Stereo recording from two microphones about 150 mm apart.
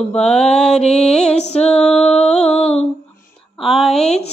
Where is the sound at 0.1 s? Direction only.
5° left (ahead or behind).